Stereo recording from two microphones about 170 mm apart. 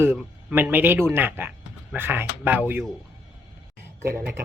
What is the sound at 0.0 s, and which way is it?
Speech, 15° right (ahead or behind).